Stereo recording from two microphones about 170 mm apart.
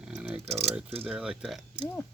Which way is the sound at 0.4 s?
40° right (ahead or behind).